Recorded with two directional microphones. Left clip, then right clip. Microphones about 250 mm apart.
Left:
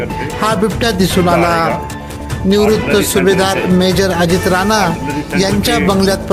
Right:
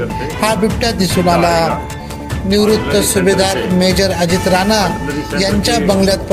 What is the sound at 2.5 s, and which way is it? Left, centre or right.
Speech, left.